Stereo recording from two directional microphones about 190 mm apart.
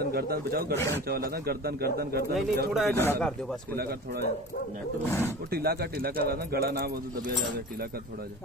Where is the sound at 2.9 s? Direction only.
10° left (ahead or behind).